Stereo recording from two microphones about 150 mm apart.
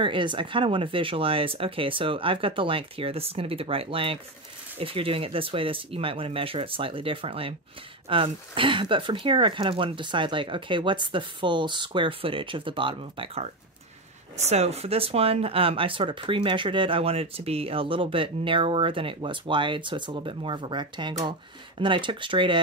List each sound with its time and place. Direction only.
0.0 s speech: 30° right (ahead or behind)